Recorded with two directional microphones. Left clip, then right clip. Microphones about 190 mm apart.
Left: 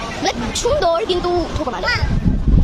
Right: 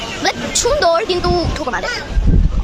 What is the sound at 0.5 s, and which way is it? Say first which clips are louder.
Speech: right 3 dB; 5° right (ahead or behind).